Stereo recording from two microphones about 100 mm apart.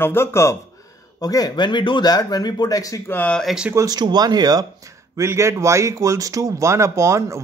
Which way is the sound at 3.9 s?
45° right (ahead or behind).